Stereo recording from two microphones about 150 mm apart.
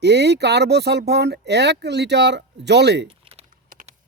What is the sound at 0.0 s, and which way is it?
Speech, 90° right.